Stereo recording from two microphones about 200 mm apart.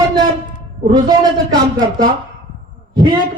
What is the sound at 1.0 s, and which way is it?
Speech, 20° right (ahead or behind).